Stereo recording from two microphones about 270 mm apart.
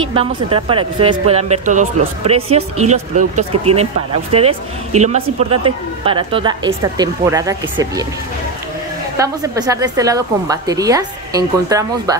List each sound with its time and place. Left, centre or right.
0.1 s speech: centre
9.1 s a woman's voice: centre